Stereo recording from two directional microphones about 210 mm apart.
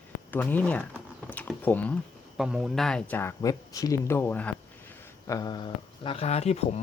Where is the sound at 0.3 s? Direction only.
10° left (ahead or behind).